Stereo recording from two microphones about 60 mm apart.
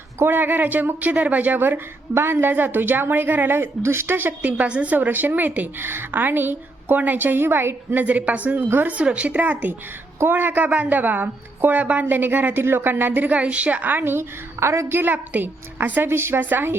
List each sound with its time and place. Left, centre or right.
0.2 s a woman's voice: right
4.4 s a woman's voice: right
8.0 s a woman's voice: right
9.0 s a woman's voice: right
14.8 s a woman's voice: right